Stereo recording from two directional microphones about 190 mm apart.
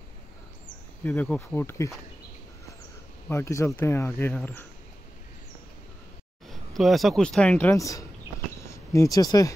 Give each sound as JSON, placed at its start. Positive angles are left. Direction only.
{"t": 1.0, "sound": "speech", "side_deg": 10}
{"t": 3.3, "sound": "speech", "side_deg": 15}
{"t": 6.5, "sound": "speech", "side_deg": 0}
{"t": 8.5, "sound": "a sound", "side_deg": 15}